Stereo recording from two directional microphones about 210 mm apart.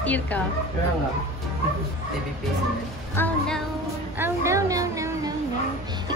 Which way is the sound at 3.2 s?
5° left (ahead or behind).